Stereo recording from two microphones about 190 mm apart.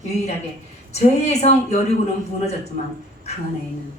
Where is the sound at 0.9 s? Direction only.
35° left (ahead or behind).